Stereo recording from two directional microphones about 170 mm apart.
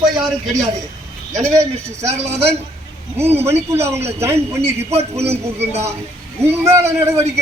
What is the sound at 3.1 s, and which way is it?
Speech, 15° right (ahead or behind).